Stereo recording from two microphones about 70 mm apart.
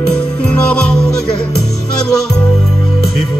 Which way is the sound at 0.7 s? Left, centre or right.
Centre.